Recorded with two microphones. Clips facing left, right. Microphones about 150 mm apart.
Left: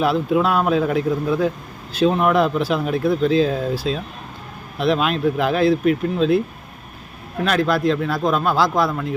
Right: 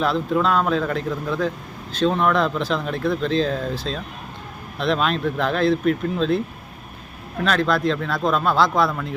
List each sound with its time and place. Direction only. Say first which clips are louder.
0.0 s speech: left 3 dB; 10° left (ahead or behind)
7.4 s speech: left 2 dB; 5° left (ahead or behind)